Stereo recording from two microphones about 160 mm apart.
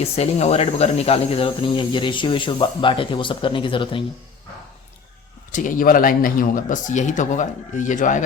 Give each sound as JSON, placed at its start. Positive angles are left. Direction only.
{"t": 0.0, "sound": "speech", "side_deg": 40}
{"t": 5.5, "sound": "a man's voice", "side_deg": 55}